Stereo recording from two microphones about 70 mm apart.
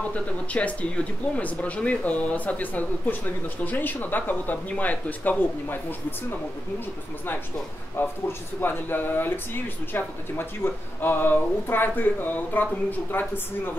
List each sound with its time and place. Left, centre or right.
0.1 s speech: centre
8.0 s speech: left